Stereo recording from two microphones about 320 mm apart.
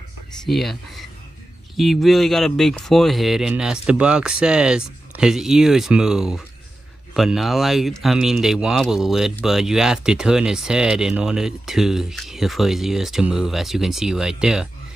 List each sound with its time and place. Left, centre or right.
0.5 s speech: centre